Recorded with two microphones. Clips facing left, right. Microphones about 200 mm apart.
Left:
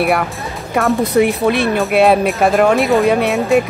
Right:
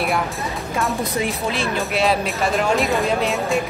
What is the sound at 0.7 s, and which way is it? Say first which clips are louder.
Speech: left 10 dB; 65° left (ahead or behind).